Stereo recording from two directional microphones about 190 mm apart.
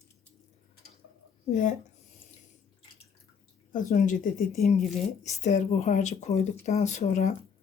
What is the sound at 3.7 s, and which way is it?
Speech, 40° left (ahead or behind).